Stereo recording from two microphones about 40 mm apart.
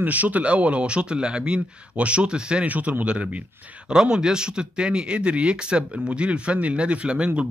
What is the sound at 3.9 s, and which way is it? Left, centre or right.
Speech, right.